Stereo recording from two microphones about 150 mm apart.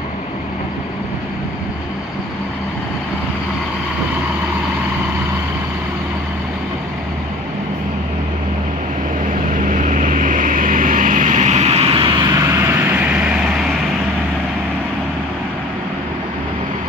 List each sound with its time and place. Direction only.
9.6 s vehicle: 60° right (ahead or behind); by 12.1 s 40° right (ahead or behind)
12.3 s vehicle: 20° right (ahead or behind)